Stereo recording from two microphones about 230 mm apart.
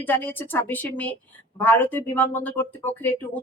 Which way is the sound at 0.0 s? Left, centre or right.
Centre.